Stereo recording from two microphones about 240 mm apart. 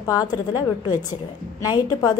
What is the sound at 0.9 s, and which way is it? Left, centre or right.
Speech, left.